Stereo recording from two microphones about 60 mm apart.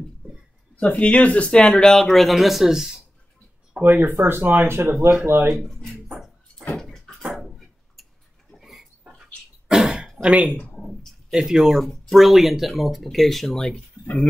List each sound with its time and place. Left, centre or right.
0.7 s speech: left; by 2.9 s centre
3.8 s speech: right
6.8 s bathtub: centre
7.3 s a sound: centre
9.7 s throat clearing: centre
11.2 s speech: centre